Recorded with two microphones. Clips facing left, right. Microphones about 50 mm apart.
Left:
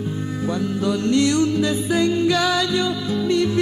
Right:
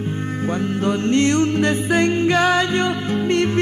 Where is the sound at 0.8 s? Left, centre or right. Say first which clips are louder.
Right 1 dB; right.